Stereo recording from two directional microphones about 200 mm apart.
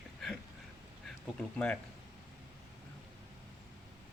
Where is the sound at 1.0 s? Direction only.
5° left (ahead or behind).